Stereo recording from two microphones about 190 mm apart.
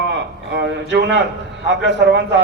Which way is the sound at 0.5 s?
65° right (ahead or behind).